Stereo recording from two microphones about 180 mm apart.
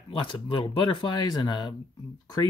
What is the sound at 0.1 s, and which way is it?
Speech, 25° left (ahead or behind).